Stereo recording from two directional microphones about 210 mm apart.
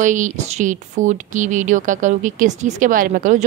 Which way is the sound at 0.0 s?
35° right (ahead or behind).